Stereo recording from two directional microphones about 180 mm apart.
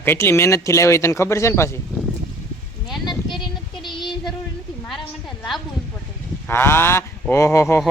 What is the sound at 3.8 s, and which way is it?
Child singing, 25° left (ahead or behind).